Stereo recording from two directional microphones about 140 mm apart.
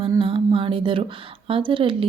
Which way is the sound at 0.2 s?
40° right (ahead or behind).